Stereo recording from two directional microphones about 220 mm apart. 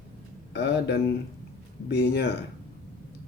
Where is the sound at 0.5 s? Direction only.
50° left (ahead or behind).